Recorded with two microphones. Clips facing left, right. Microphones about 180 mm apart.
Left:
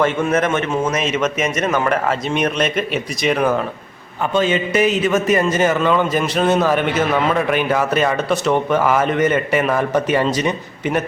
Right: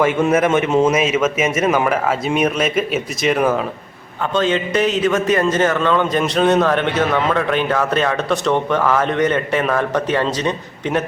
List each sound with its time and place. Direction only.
0.0 s a man's voice: 10° right (ahead or behind)
0.9 s a man's voice: 5° right (ahead or behind)
4.4 s a man's voice: 10° left (ahead or behind)